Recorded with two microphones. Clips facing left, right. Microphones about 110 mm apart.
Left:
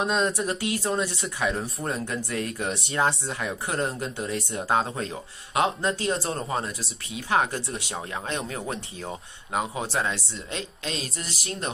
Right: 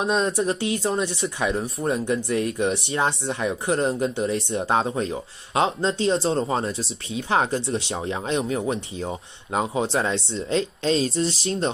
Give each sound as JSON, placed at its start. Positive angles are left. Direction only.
{"t": 0.0, "sound": "speech", "side_deg": -30}